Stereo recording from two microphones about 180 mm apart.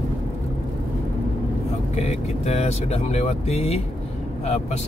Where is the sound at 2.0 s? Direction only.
40° left (ahead or behind).